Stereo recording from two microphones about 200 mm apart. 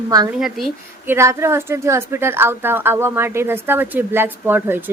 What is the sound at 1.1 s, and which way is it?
A woman's voice, 15° right (ahead or behind).